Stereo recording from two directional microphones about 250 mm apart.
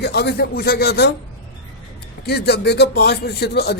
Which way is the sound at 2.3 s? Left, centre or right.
Left.